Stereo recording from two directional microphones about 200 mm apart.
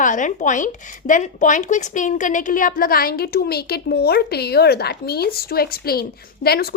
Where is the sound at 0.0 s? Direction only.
40° left (ahead or behind).